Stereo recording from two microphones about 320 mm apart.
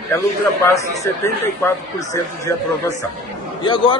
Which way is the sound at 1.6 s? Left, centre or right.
Centre.